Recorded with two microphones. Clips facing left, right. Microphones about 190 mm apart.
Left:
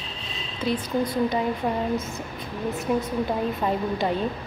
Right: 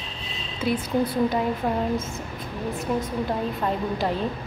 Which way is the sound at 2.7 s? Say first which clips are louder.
Left 2 dB; centre (ahead or behind).